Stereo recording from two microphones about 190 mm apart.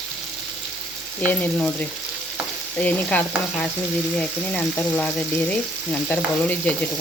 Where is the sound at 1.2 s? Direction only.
10° left (ahead or behind).